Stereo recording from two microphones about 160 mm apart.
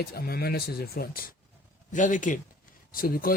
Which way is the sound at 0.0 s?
70° left (ahead or behind).